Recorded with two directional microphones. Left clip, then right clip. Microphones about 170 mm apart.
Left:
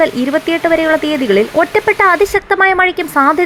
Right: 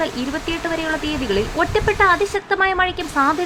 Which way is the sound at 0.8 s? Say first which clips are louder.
Left 10 dB; 30° left (ahead or behind).